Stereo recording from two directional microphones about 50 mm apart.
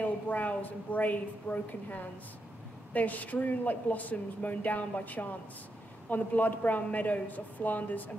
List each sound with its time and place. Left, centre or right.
0.0 s speech: left